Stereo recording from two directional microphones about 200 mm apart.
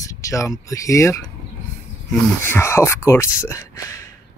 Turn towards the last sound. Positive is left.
turn(degrees=15)  # may be behind; listen again after turning